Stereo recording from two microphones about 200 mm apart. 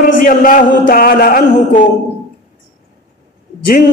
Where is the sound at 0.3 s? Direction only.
45° left (ahead or behind).